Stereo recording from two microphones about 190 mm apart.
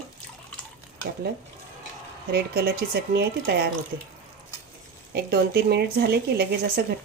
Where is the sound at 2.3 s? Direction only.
55° right (ahead or behind).